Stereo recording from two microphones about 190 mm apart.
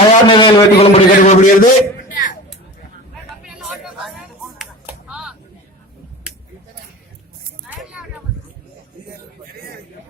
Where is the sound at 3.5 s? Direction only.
Centre (ahead or behind).